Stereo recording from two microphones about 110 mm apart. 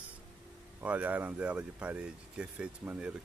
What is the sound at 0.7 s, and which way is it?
Speech, 15° right (ahead or behind).